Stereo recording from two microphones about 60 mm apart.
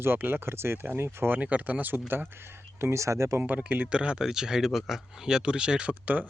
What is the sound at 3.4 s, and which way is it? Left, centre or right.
Speech, right.